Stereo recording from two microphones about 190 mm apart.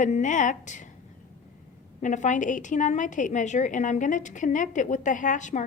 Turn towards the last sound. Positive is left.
turn(degrees=40)  # may be behind; listen again after turning